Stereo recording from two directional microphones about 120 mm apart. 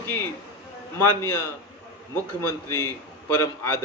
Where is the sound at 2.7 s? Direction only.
20° left (ahead or behind).